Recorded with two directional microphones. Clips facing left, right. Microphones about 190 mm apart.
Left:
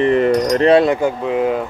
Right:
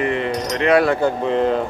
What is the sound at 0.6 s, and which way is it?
Speech, 20° left (ahead or behind).